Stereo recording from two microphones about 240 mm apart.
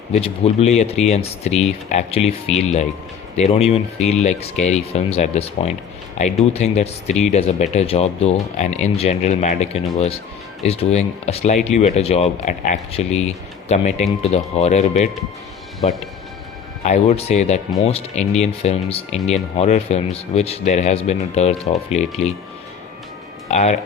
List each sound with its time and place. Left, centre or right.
0.1 s speech: left
23.5 s speech: left